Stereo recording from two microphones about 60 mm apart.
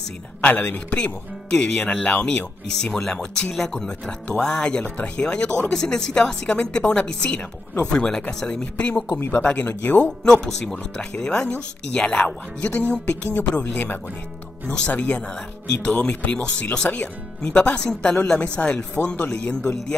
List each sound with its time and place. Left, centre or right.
0.4 s speech: left
1.5 s speech: centre
10.2 s speech: centre
12.6 s speech: left
14.7 s speech: left